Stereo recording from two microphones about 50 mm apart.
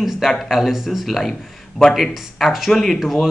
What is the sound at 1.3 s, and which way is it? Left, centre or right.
Speech, centre.